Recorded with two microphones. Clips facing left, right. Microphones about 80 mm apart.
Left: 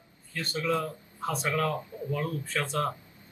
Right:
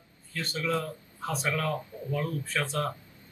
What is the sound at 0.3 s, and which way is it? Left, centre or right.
Speech, centre.